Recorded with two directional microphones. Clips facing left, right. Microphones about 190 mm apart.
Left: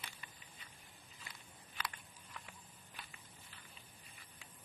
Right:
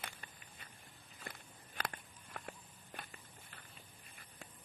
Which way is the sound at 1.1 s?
50° right (ahead or behind).